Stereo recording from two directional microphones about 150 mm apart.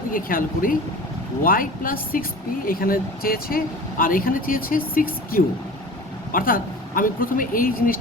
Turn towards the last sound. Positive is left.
turn(degrees=70)  # may be behind; listen again after turning